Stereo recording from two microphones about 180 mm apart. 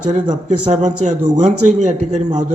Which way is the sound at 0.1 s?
40° right (ahead or behind).